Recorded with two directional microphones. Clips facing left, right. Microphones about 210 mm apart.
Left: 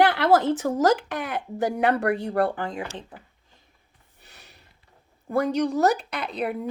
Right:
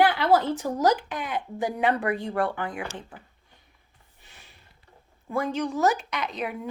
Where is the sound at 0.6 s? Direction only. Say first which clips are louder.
Left 4 dB; 55° left (ahead or behind).